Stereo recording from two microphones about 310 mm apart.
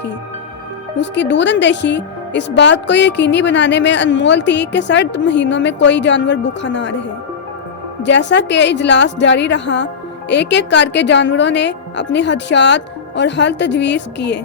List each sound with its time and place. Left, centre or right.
0.9 s a woman's voice: left
8.0 s a woman's voice: left